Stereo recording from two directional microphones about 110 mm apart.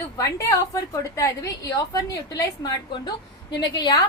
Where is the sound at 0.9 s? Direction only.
30° left (ahead or behind).